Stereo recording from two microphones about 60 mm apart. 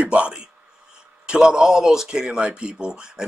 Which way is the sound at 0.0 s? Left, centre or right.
Right.